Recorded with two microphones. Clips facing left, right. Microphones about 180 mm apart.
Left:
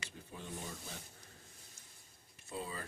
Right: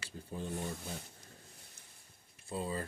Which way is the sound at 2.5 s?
30° right (ahead or behind).